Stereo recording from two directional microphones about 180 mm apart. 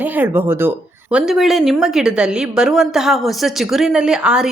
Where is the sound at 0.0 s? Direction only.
10° right (ahead or behind).